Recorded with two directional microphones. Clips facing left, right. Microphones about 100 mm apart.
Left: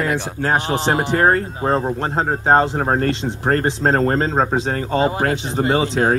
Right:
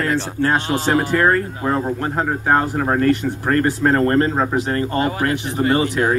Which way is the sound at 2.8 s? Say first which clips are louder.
Even; 40° left (ahead or behind).